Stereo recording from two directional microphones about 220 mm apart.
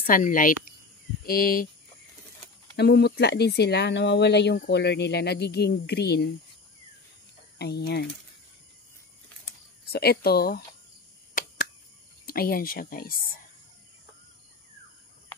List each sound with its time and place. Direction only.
0.0 s speech: 40° left (ahead or behind)
2.7 s speech: 50° left (ahead or behind)
7.5 s speech: 45° left (ahead or behind)
9.8 s speech: 45° left (ahead or behind)
12.3 s speech: 40° left (ahead or behind)